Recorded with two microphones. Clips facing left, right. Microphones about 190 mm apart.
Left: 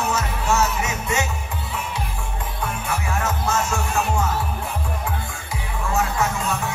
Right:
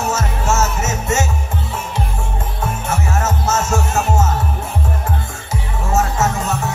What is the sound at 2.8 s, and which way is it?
Music, 45° right (ahead or behind).